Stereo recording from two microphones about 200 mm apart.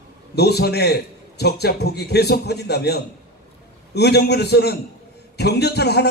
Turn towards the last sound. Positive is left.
turn(degrees=55)  # may be behind; listen again after turning